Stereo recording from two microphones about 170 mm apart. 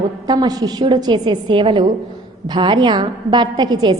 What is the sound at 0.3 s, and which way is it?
A woman's voice, 25° right (ahead or behind).